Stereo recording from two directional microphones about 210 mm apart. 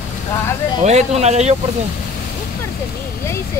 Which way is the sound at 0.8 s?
30° right (ahead or behind).